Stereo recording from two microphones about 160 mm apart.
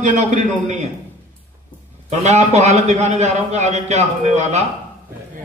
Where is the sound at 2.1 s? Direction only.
45° right (ahead or behind).